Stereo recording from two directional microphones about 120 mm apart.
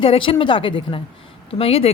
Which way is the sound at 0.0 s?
50° left (ahead or behind).